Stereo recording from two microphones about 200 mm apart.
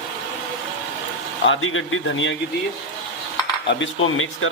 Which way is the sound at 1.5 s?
80° left.